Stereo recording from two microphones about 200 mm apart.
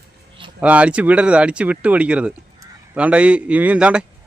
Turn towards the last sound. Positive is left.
turn(degrees=-5)  # may be behind; listen again after turning